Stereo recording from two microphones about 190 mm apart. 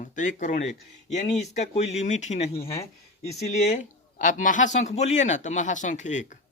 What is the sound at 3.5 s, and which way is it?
Speech, 40° left (ahead or behind).